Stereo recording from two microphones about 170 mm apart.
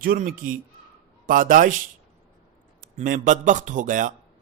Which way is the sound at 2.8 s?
55° right (ahead or behind).